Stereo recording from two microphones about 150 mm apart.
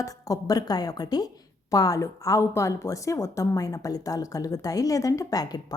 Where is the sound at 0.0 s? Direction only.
25° left (ahead or behind).